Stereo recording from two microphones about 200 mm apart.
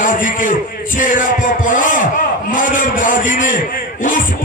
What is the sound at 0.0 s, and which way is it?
A man's voice, 40° left (ahead or behind).